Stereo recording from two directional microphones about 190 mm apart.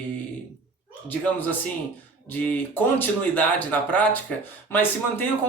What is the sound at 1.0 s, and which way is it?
Speech, 10° left (ahead or behind).